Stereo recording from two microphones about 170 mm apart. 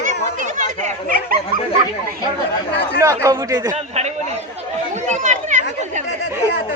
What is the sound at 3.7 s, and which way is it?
Speech, 40° right (ahead or behind).